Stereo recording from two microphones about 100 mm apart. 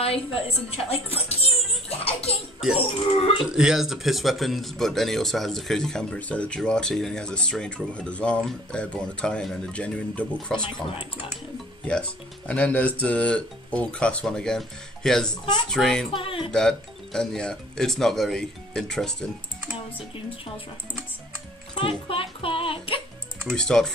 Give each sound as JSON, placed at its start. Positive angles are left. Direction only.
{"t": 0.0, "sound": "a woman's voice", "side_deg": 75}
{"t": 0.8, "sound": "speech", "side_deg": 85}
{"t": 1.9, "sound": "a sound", "side_deg": 80}
{"t": 3.2, "sound": "speech", "side_deg": 70}
{"t": 3.4, "sound": "speech", "side_deg": -5}
{"t": 11.8, "sound": "speech", "side_deg": 10}
{"t": 16.1, "sound": "speech", "side_deg": 65}
{"t": 16.5, "sound": "speech", "side_deg": 5}
{"t": 21.7, "sound": "music", "side_deg": 65}
{"t": 23.5, "sound": "speech", "side_deg": 5}